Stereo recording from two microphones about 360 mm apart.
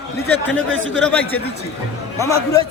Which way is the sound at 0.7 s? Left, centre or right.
Right.